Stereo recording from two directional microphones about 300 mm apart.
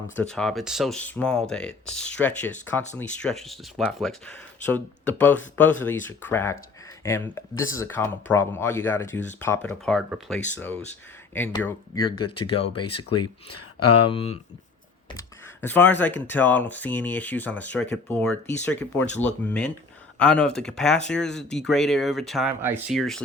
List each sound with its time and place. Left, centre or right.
0.2 s speech: centre
12.2 s speech: centre
13.5 s speech: left
14.1 s speech: centre
15.6 s speech: centre